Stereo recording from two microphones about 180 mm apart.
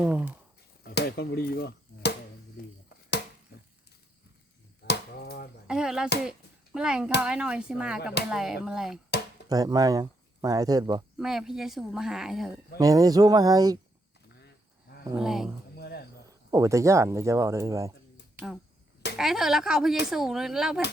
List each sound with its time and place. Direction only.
0.0 s speech: 10° right (ahead or behind)
0.9 s chop: 65° left (ahead or behind)
2.6 s speech: 55° left (ahead or behind)
4.9 s chop: 60° left (ahead or behind)
5.6 s a woman's voice: 5° right (ahead or behind)
9.5 s speech: 20° right (ahead or behind)
11.2 s a woman's voice: centre (ahead or behind)
12.8 s speech: 20° right (ahead or behind)
15.1 s a woman's voice: 5° right (ahead or behind)
15.7 s cricket: 65° left (ahead or behind)
16.3 s speech: 20° right (ahead or behind)
18.3 s a woman's voice: 5° right (ahead or behind)